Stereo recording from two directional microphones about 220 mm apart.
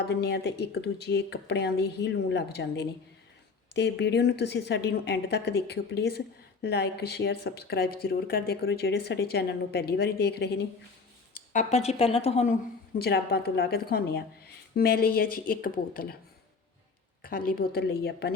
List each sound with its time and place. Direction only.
0.1 s a woman's voice: 50° left (ahead or behind)
11.5 s a woman's voice: 30° left (ahead or behind)
13.0 s a woman's voice: 45° left (ahead or behind)
17.2 s a woman's voice: 40° left (ahead or behind)